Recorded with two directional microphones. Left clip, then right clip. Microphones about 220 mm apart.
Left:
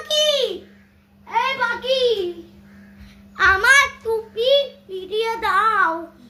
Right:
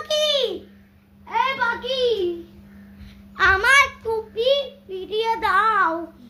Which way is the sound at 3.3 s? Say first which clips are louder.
Left 2 dB; 15° left (ahead or behind).